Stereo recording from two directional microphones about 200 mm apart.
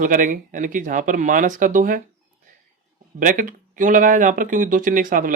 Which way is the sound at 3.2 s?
40° right (ahead or behind).